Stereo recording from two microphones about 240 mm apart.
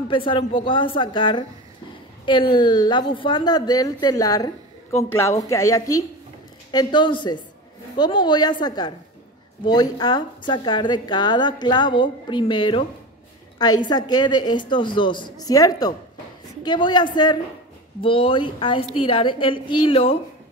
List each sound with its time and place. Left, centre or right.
0.1 s a woman's voice: left